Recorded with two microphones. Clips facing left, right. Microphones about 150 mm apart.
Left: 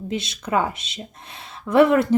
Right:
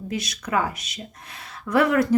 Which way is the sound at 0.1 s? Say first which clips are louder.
Left 2 dB; 25° left (ahead or behind).